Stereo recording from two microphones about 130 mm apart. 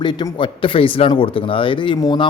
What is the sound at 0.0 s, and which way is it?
Speech, 35° left (ahead or behind).